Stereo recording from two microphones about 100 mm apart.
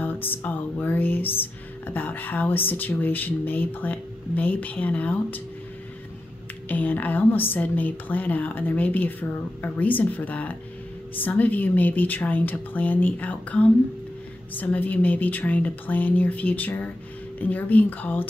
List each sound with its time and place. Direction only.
0.0 s music: 20° left (ahead or behind)
6.7 s a woman's voice: 15° left (ahead or behind)